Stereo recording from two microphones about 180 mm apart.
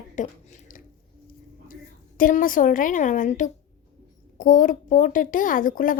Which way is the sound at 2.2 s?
50° left (ahead or behind).